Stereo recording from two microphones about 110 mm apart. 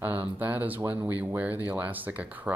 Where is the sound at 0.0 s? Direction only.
15° right (ahead or behind).